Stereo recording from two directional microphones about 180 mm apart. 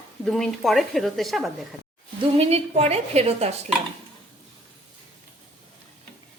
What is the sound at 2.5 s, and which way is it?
A woman's voice, 35° right (ahead or behind).